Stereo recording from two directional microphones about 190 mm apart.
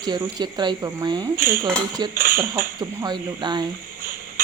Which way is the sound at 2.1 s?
50° right (ahead or behind).